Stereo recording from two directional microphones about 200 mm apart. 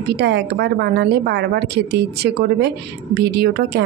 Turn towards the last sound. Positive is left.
turn(degrees=-55)  # may be behind; listen again after turning